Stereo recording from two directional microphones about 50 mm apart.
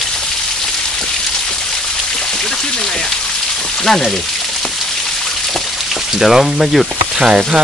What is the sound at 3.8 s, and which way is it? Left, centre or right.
Speech, centre.